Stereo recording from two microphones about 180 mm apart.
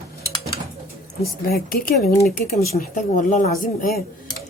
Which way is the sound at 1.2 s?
55° left (ahead or behind).